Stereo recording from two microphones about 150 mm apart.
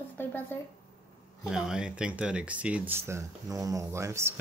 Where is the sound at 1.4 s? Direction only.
5° right (ahead or behind).